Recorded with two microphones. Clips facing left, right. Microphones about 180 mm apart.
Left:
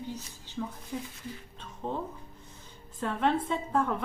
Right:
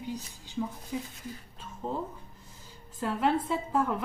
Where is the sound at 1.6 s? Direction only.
5° right (ahead or behind).